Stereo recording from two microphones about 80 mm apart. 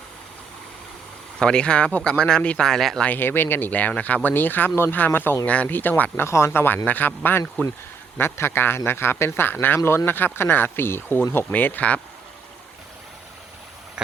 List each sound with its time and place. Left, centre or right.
1.4 s speech: centre
3.1 s speech: left